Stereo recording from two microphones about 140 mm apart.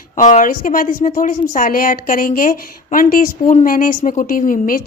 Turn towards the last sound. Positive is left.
turn(degrees=80)